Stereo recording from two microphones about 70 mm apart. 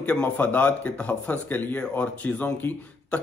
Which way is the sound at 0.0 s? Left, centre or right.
Left.